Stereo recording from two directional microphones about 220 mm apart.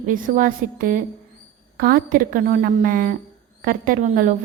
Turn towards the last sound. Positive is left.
turn(degrees=-40)  # may be behind; listen again after turning